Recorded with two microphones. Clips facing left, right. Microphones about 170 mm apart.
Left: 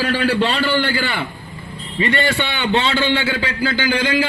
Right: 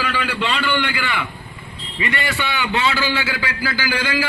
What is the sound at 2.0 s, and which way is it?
A man's voice, 25° left (ahead or behind).